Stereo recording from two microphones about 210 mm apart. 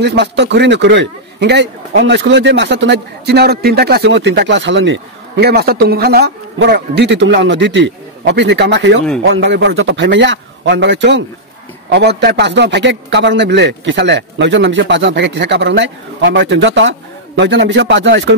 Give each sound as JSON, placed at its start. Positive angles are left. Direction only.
{"t": 0.0, "sound": "a man's voice", "side_deg": -55}